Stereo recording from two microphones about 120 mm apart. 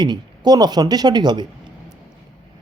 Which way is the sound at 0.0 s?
35° right (ahead or behind).